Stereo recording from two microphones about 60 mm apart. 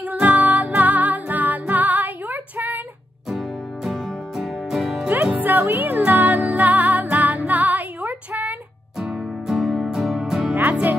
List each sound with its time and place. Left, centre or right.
0.2 s music: right
3.3 s music: centre
5.4 s music: right
9.0 s music: centre
10.5 s music: right